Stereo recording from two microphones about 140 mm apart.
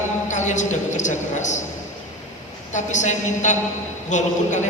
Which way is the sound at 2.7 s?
60° left (ahead or behind).